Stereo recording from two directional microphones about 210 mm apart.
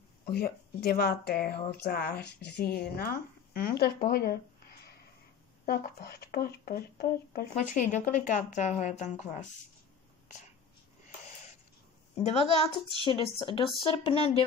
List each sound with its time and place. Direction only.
0.3 s speech: 45° left (ahead or behind)
5.7 s speech: 45° left (ahead or behind)
12.2 s a woman's voice: 30° left (ahead or behind)